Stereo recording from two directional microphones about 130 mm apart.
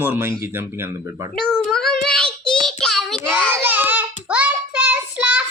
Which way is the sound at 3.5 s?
15° right (ahead or behind).